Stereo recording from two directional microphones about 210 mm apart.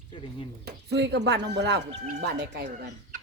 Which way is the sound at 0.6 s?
50° right (ahead or behind).